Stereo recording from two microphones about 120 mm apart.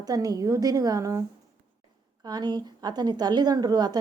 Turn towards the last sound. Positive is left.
turn(degrees=-35)  # may be behind; listen again after turning